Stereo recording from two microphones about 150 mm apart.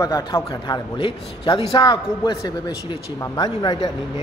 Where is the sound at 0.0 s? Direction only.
25° left (ahead or behind).